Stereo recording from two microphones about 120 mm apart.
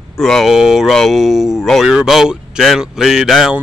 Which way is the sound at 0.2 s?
Centre (ahead or behind).